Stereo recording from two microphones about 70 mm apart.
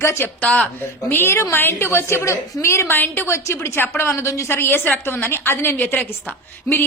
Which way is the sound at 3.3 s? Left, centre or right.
Left.